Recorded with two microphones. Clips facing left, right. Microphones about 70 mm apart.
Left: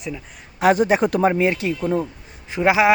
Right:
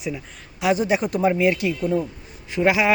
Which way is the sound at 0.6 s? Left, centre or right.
Left.